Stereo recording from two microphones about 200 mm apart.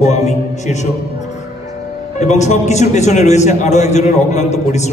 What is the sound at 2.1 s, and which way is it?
A man's voice, 35° left (ahead or behind).